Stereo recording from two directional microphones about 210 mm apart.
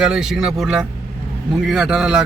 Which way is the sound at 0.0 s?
Centre (ahead or behind).